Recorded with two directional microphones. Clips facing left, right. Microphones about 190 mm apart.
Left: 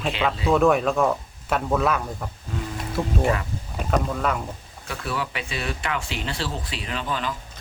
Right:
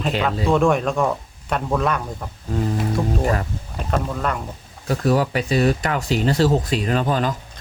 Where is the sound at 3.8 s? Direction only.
Centre (ahead or behind).